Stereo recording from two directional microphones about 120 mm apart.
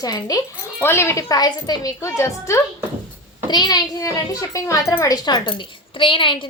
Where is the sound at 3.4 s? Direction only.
35° left (ahead or behind).